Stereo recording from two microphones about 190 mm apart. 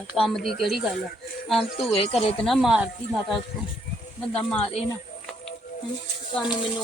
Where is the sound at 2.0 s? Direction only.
30° left (ahead or behind).